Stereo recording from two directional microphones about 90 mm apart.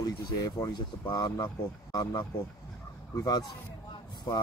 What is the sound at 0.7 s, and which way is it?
Speech, 50° left (ahead or behind).